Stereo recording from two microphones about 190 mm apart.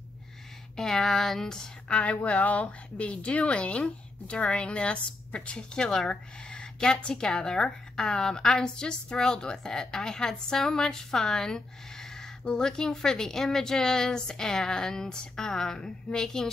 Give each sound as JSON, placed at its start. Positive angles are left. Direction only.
{"t": 0.7, "sound": "speech", "side_deg": 5}